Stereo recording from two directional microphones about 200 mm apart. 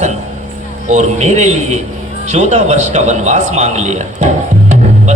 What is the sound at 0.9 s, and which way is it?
A man's voice, 35° right (ahead or behind).